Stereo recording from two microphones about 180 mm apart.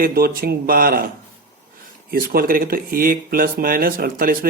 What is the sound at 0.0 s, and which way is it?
Speech, 55° right (ahead or behind).